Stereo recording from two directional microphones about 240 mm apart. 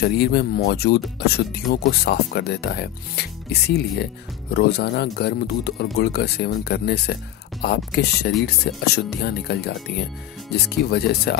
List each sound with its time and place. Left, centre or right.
0.0 s speech: left